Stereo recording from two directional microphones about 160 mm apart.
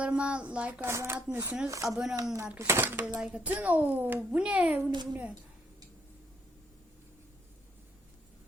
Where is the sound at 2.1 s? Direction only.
20° right (ahead or behind).